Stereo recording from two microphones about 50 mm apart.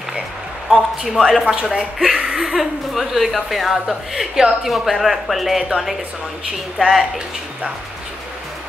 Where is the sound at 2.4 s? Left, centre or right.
Centre.